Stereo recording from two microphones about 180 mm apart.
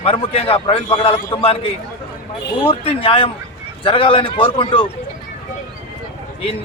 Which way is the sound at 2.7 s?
30° left (ahead or behind).